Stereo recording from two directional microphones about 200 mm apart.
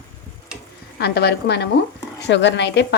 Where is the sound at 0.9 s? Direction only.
55° left (ahead or behind).